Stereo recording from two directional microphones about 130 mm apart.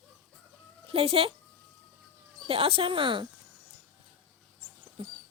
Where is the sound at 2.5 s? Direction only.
45° right (ahead or behind).